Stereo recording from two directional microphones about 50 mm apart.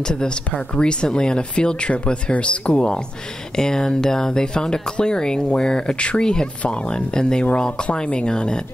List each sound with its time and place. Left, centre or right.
0.1 s speech: centre